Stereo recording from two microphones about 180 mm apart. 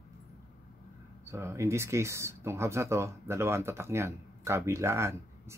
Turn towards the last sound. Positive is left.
turn(degrees=-15)  # may be behind; listen again after turning